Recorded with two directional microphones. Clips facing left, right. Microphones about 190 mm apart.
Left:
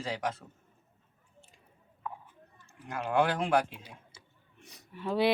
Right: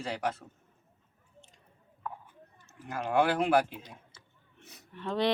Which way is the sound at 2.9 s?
Centre (ahead or behind).